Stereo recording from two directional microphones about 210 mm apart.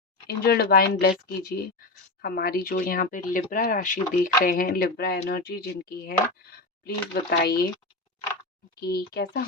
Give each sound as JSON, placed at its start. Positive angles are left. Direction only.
{"t": 0.3, "sound": "speech", "side_deg": 50}
{"t": 8.8, "sound": "speech", "side_deg": 50}